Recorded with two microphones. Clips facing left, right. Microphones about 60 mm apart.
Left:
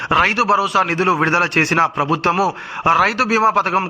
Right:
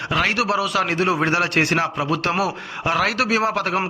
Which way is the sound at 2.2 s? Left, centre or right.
Centre.